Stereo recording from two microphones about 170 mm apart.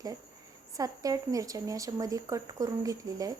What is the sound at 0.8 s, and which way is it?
Speech, 20° right (ahead or behind).